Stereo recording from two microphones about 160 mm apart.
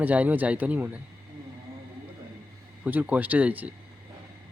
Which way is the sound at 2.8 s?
10° right (ahead or behind).